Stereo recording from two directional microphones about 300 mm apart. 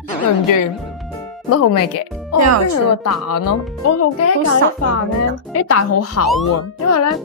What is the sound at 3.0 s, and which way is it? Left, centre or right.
Speech, left.